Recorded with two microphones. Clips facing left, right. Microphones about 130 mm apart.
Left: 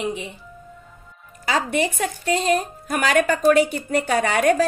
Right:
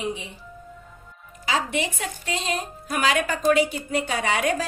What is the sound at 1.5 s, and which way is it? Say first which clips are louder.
A woman's voice: left 4 dB; 45° left (ahead or behind).